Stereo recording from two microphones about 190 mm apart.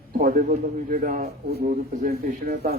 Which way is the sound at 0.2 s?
45° right (ahead or behind).